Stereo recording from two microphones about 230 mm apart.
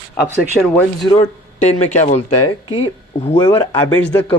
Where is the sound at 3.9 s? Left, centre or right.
Centre.